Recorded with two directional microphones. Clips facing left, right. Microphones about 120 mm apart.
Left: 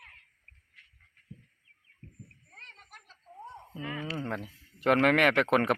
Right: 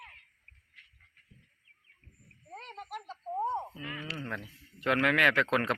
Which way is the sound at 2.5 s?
75° right (ahead or behind).